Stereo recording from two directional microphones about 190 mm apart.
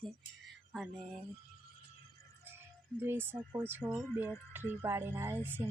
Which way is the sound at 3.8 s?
5° left (ahead or behind).